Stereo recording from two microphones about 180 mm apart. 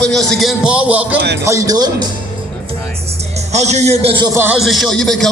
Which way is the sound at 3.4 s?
40° right (ahead or behind).